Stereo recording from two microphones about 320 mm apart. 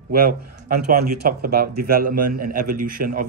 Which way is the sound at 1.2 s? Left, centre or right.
Right.